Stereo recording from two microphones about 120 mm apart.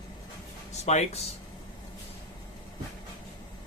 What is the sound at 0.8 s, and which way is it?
Speech, 60° left (ahead or behind).